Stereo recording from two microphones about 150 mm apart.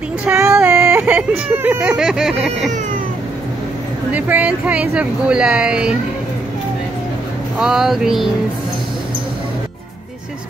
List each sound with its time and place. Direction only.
0.4 s speech: 15° right (ahead or behind)
4.1 s speech: 10° right (ahead or behind)
7.5 s speech: 5° right (ahead or behind)